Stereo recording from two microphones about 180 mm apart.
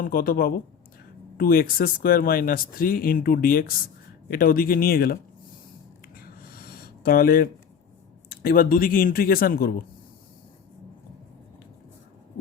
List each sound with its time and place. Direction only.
0.0 s speech: 50° left (ahead or behind)
6.1 s a sound: 55° left (ahead or behind)
8.3 s speech: 55° left (ahead or behind)